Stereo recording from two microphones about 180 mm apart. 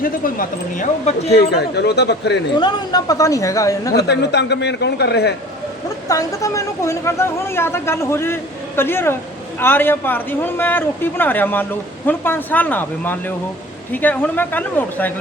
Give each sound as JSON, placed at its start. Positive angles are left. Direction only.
{"t": 0.0, "sound": "speech", "side_deg": 50}
{"t": 1.4, "sound": "speech", "side_deg": 65}
{"t": 2.6, "sound": "speech", "side_deg": 25}
{"t": 3.9, "sound": "speech", "side_deg": 70}
{"t": 6.1, "sound": "speech", "side_deg": 20}